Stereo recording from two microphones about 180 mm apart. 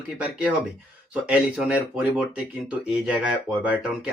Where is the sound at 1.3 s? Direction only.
5° right (ahead or behind).